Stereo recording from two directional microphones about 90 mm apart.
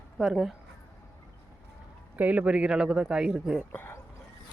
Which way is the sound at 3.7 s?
25° left (ahead or behind).